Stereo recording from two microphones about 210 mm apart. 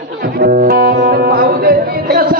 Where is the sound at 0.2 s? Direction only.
45° right (ahead or behind).